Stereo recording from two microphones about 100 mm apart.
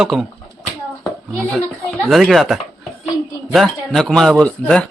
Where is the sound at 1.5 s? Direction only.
5° left (ahead or behind).